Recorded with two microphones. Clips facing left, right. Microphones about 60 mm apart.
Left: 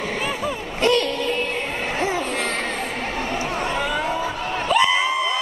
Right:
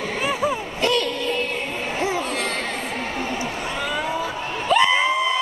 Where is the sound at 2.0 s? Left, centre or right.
Left.